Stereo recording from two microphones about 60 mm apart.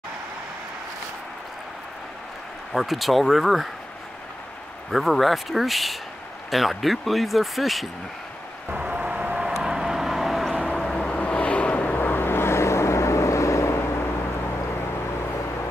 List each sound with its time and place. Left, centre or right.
2.7 s speech: centre
4.9 s speech: centre
8.7 s rain: centre
9.5 s vehicle: centre
10.5 s vehicle: centre; by 14.0 s left